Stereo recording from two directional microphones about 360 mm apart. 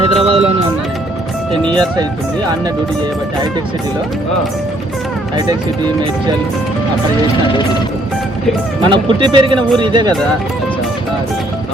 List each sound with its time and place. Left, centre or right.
0.0 s music: centre
8.9 s speech: centre